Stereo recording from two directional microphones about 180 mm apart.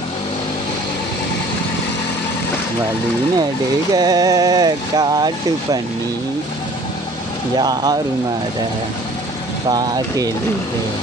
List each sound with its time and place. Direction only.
3.9 s speech: 20° right (ahead or behind)
7.5 s speech: 20° right (ahead or behind)
9.7 s speech: 20° right (ahead or behind)